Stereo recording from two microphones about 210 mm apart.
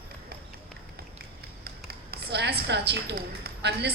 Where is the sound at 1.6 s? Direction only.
50° right (ahead or behind).